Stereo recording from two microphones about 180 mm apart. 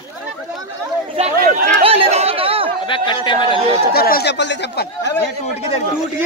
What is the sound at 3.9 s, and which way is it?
Speech, 60° left (ahead or behind).